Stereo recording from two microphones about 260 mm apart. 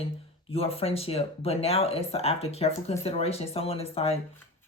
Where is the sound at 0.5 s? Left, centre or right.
Left.